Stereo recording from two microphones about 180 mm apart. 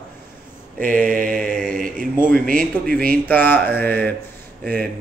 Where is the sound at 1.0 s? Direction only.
50° right (ahead or behind).